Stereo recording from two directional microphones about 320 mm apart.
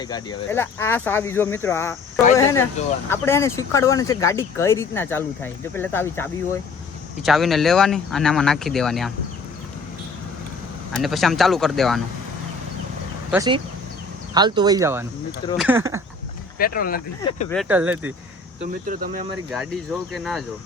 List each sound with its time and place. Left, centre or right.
0.0 s speech: centre
10.9 s speech: centre
13.3 s speech: centre
16.6 s speech: left
17.5 s speech: centre
18.6 s speech: right
19.5 s speech: centre